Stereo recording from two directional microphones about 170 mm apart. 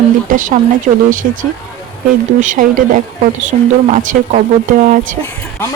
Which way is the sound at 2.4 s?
50° right (ahead or behind).